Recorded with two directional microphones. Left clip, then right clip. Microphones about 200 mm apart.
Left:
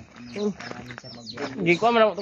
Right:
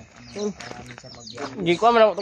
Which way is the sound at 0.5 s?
15° left (ahead or behind).